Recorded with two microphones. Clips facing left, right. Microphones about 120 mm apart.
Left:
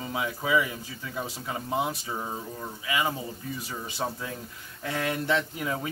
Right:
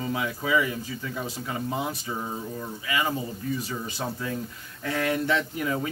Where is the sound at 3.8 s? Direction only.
20° left (ahead or behind).